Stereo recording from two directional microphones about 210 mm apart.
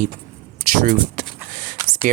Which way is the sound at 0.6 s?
40° right (ahead or behind).